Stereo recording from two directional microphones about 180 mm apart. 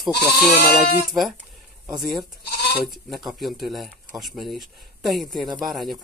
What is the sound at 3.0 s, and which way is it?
Speech, centre (ahead or behind).